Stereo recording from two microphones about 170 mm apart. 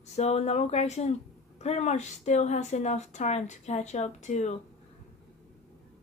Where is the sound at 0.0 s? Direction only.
40° left (ahead or behind).